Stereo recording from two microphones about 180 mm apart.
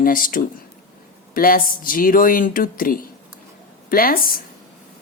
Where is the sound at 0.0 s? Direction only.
50° left (ahead or behind).